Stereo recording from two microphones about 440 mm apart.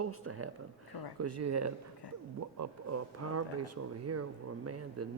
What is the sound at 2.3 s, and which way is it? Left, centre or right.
Speech, right.